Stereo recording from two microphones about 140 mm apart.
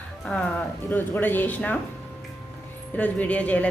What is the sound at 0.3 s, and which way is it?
A woman's voice, 5° left (ahead or behind).